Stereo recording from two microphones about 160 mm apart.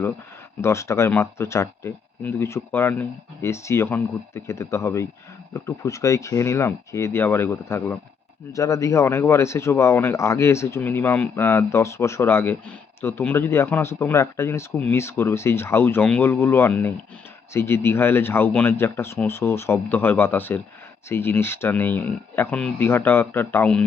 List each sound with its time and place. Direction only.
0.6 s speech: 15° left (ahead or behind)